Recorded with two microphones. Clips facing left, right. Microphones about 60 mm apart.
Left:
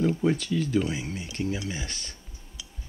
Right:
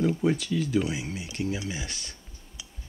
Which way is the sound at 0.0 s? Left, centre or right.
Centre.